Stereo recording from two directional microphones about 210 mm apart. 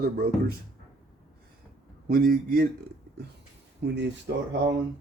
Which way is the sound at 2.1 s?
45° right (ahead or behind).